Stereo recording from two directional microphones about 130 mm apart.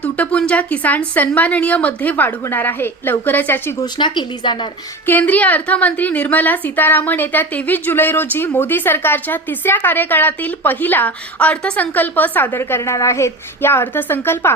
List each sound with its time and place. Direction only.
0.0 s a woman's voice: 10° left (ahead or behind)
3.9 s a woman's voice: 35° left (ahead or behind)
5.0 s a woman's voice: 15° left (ahead or behind)